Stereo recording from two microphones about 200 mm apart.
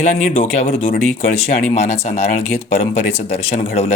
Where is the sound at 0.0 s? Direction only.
30° left (ahead or behind).